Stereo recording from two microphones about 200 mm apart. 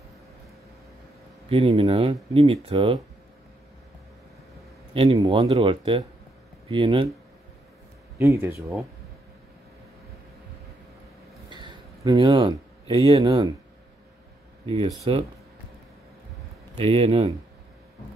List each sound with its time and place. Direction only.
1.5 s speech: 30° right (ahead or behind)
4.9 s speech: 25° right (ahead or behind)
8.2 s speech: 15° right (ahead or behind)
11.4 s a sound: 25° right (ahead or behind)
14.7 s speech: 25° right (ahead or behind)
16.7 s speech: 30° right (ahead or behind)